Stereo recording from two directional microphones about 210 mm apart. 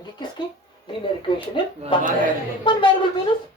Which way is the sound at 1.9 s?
25° left (ahead or behind).